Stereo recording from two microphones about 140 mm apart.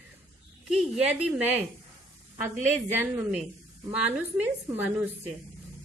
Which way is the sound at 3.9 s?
10° right (ahead or behind).